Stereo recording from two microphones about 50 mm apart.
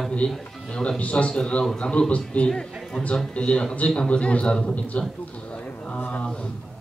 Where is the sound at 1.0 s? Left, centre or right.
Left.